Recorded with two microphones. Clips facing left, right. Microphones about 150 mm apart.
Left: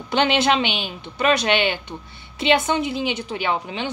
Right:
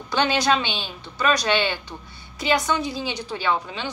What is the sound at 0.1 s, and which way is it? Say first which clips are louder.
A woman's voice: left 2 dB; 20° left (ahead or behind).